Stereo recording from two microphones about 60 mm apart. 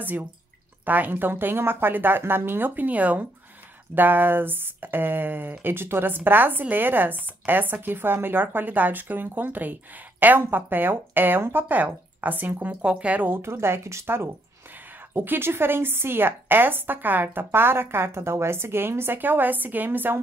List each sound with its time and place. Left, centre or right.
0.0 s speech: right
13.4 s a woman's voice: right